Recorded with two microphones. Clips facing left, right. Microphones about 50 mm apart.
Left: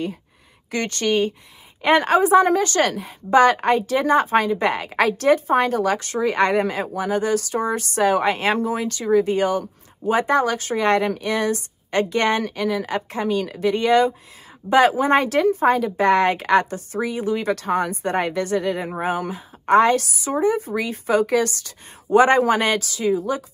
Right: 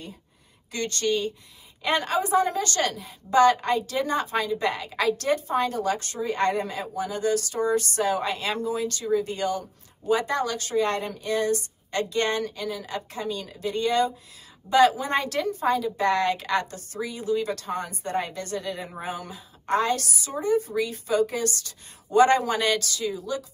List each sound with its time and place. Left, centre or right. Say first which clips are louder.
0.7 s speech: left 4 dB; left
20.7 s speech: left 4 dB; left